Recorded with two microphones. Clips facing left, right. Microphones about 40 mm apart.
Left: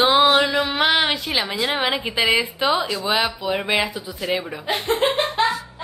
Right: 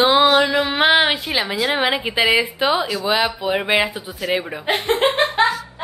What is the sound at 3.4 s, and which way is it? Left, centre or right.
Speech, right.